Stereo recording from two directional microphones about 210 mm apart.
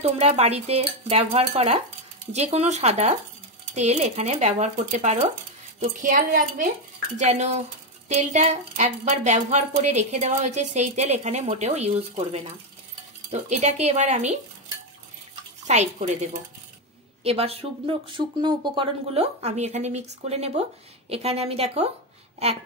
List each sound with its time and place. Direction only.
0.0 s speech: 30° right (ahead or behind)
15.6 s speech: 35° right (ahead or behind)